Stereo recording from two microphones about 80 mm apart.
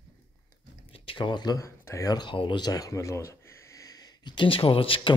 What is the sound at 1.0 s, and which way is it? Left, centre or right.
Speech, left.